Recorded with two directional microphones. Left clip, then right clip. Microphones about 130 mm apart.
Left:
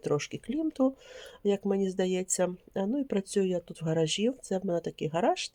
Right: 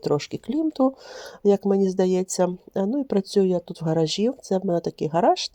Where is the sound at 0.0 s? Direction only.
35° right (ahead or behind).